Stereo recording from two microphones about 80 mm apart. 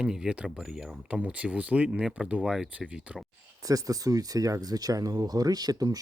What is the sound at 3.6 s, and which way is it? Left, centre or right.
Speech, right.